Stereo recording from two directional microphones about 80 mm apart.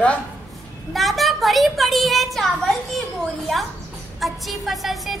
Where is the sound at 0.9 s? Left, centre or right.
Centre.